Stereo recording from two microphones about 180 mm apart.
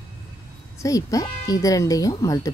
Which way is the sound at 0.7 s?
20° left (ahead or behind).